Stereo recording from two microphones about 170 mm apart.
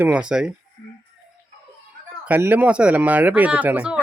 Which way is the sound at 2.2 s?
10° right (ahead or behind).